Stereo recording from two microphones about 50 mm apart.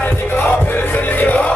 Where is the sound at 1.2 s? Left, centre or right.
Left.